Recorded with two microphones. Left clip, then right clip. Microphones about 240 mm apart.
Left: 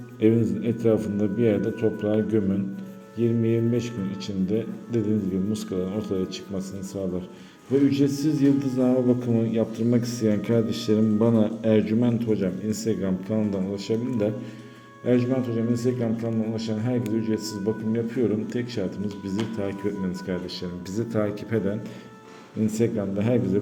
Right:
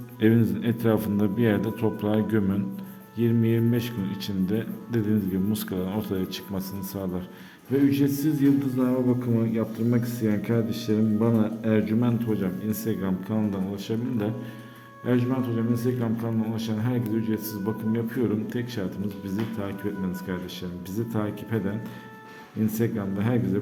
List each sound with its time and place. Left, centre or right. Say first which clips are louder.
0.2 s a man's voice: left 1 dB; right; by 19.7 s centre
20.9 s a man's voice: left 4 dB; centre